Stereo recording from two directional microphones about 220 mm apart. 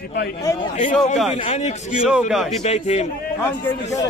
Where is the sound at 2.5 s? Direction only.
30° left (ahead or behind).